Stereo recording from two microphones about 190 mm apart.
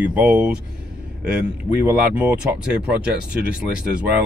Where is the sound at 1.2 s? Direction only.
60° right (ahead or behind).